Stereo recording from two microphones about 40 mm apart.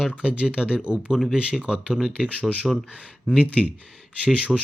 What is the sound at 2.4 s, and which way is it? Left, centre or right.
Speech, centre.